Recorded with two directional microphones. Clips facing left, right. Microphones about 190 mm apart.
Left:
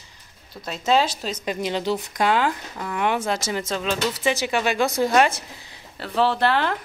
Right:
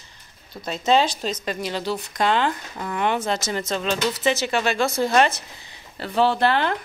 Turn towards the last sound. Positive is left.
turn(degrees=0)  # may be behind; listen again after turning